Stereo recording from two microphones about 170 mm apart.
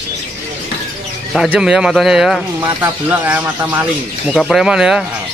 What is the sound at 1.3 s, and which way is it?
Speech, centre (ahead or behind).